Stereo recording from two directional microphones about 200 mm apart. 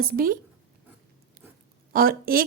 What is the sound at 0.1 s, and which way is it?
Speech, 45° right (ahead or behind).